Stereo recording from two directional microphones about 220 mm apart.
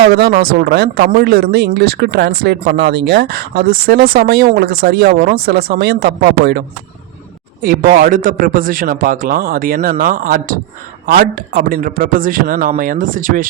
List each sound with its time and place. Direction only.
0.1 s a man's voice: 45° right (ahead or behind)